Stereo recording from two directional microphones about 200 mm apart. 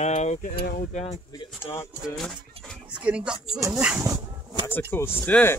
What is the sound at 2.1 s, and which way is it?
Speech, 5° left (ahead or behind).